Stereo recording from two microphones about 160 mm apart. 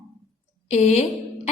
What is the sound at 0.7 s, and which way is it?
Speech, 45° left (ahead or behind).